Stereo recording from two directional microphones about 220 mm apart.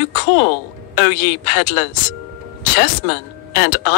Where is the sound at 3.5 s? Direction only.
50° left (ahead or behind).